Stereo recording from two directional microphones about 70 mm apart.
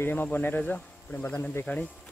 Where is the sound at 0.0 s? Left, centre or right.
Left.